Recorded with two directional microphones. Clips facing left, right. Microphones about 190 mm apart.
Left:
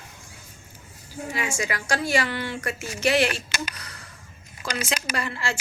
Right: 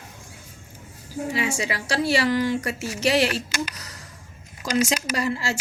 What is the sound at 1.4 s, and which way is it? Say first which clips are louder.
A woman's voice: right 1 dB; 30° right (ahead or behind).